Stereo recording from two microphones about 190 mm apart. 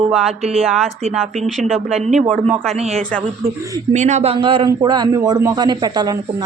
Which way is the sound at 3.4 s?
15° right (ahead or behind).